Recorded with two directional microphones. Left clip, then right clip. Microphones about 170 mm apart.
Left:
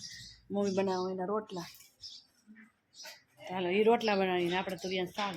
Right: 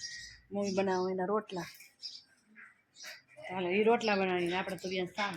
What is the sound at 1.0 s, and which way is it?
Speech, 5° right (ahead or behind).